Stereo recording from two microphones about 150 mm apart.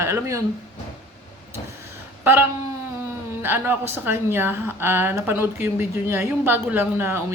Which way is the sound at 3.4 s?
15° right (ahead or behind).